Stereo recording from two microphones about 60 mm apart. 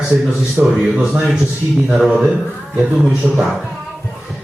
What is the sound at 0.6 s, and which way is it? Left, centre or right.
Speech, right.